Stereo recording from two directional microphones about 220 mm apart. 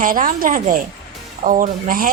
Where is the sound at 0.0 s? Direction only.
40° right (ahead or behind).